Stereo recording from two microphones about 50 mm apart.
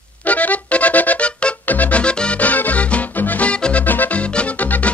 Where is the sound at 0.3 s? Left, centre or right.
Left.